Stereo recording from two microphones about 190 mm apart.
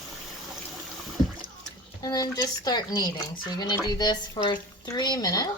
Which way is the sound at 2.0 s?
20° left (ahead or behind).